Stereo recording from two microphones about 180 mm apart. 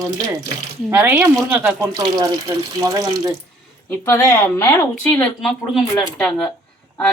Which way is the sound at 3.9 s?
15° left (ahead or behind).